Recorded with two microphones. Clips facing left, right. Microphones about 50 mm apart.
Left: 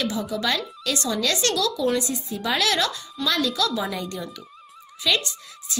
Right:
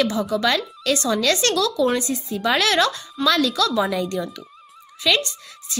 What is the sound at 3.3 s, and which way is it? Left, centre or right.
Speech, right.